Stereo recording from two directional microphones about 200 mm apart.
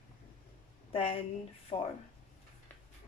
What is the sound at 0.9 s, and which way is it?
Speech, 25° left (ahead or behind).